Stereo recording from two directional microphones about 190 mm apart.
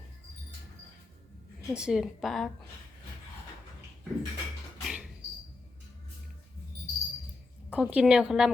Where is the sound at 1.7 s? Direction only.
5° right (ahead or behind).